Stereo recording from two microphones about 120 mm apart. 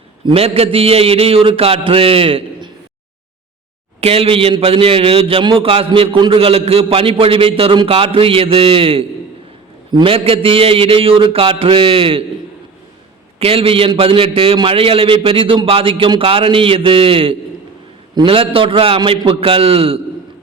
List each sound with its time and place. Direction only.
0.3 s a man's voice: 55° right (ahead or behind)
4.0 s a man's voice: 55° right (ahead or behind)
13.4 s a man's voice: 50° right (ahead or behind)